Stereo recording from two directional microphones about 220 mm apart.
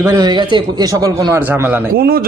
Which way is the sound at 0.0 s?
15° right (ahead or behind).